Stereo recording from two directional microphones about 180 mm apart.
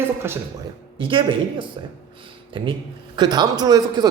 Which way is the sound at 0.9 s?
30° right (ahead or behind).